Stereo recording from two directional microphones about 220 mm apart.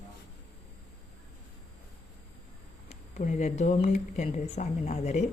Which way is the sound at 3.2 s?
35° left (ahead or behind).